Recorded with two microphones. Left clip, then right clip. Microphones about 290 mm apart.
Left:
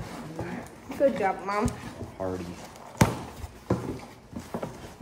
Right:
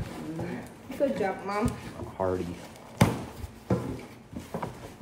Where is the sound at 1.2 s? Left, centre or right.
Left.